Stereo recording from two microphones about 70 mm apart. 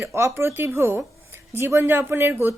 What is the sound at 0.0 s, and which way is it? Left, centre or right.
A woman's voice, right.